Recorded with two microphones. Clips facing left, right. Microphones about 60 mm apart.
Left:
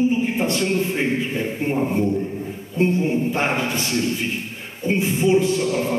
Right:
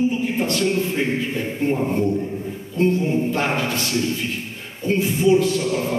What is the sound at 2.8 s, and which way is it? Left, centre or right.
A man's voice, left.